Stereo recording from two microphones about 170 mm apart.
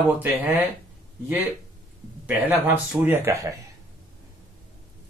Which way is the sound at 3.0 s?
15° right (ahead or behind).